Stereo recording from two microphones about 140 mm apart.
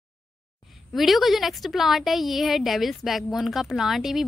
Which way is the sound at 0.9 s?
Centre (ahead or behind).